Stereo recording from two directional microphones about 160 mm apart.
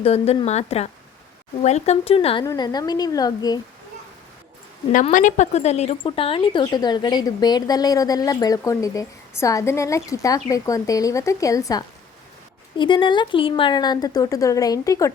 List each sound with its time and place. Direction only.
0.0 s a woman's voice: 40° left (ahead or behind)
2.4 s a woman's voice: 25° left (ahead or behind)
5.1 s a woman's voice: 50° left (ahead or behind); by 15.1 s 20° left (ahead or behind)